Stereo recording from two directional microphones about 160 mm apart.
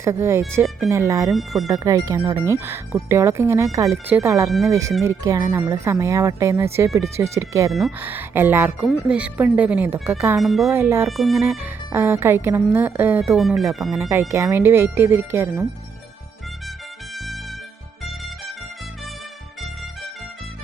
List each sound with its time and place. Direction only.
0.0 s speech: 15° right (ahead or behind)
1.3 s speech: centre (ahead or behind)
1.6 s speech: 20° right (ahead or behind)
7.7 s speech: centre (ahead or behind)
7.9 s speech: 10° right (ahead or behind)
10.3 s speech: centre (ahead or behind)
10.7 s speech: 15° right (ahead or behind)
11.2 s speech: centre (ahead or behind)
11.4 s speech: 15° right (ahead or behind)
13.6 s speech: centre (ahead or behind)
14.1 s speech: 15° right (ahead or behind)
17.2 s music: centre (ahead or behind)